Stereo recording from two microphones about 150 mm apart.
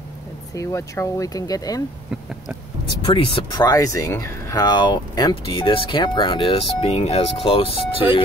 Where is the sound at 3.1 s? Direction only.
35° left (ahead or behind).